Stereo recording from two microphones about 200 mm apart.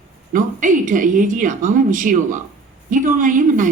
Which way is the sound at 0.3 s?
40° right (ahead or behind).